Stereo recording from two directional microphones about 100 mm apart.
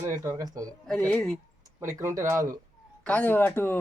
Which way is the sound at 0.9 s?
5° left (ahead or behind).